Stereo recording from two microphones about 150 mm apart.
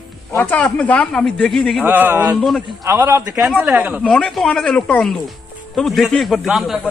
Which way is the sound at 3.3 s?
5° right (ahead or behind).